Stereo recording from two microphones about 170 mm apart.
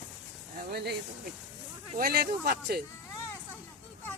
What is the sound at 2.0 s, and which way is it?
Speech, 65° right (ahead or behind).